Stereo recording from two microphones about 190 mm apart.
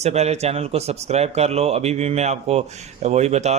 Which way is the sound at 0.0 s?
35° right (ahead or behind).